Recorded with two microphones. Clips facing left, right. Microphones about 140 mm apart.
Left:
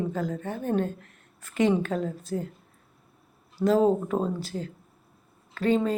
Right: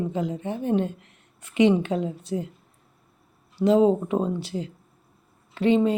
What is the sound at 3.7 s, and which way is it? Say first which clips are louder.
A woman's voice: right 3 dB; 20° right (ahead or behind).